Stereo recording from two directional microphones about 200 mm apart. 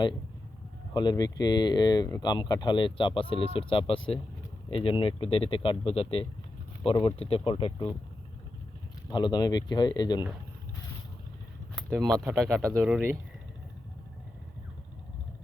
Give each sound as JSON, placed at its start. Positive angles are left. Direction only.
{"t": 0.9, "sound": "speech", "side_deg": 20}
{"t": 9.0, "sound": "speech", "side_deg": 20}
{"t": 11.7, "sound": "a sound", "side_deg": 0}
{"t": 12.3, "sound": "speech", "side_deg": 0}